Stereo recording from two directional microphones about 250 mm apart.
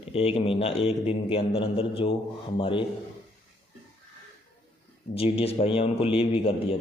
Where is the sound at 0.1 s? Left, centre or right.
Left.